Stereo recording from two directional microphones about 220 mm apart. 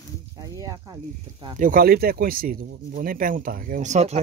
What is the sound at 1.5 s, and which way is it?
Speech, 40° right (ahead or behind).